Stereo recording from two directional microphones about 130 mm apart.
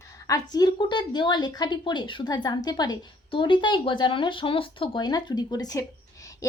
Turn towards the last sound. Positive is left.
turn(degrees=25)  # may be behind; listen again after turning